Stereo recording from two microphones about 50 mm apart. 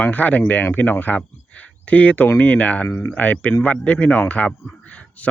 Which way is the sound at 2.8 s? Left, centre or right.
Left.